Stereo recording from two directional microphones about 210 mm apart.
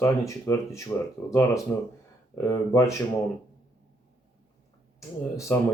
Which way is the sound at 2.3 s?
15° left (ahead or behind).